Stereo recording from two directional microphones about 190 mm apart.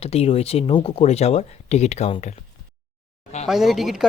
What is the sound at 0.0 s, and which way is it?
Speech, 30° left (ahead or behind).